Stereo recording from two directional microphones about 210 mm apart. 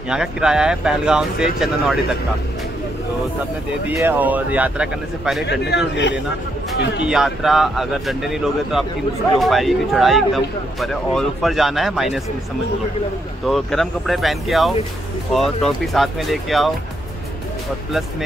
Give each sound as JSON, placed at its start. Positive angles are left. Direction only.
{"t": 0.1, "sound": "a man's voice", "side_deg": -5}
{"t": 3.8, "sound": "speech", "side_deg": -10}
{"t": 5.5, "sound": "a man's voice", "side_deg": 55}
{"t": 7.1, "sound": "a man's voice", "side_deg": 0}
{"t": 13.5, "sound": "a man's voice", "side_deg": 0}